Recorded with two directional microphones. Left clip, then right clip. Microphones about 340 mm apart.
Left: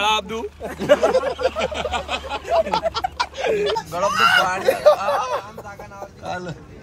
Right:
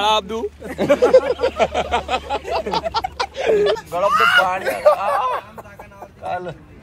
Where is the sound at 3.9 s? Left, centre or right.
Centre.